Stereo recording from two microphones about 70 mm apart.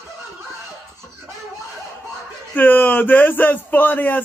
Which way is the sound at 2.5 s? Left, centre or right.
Left.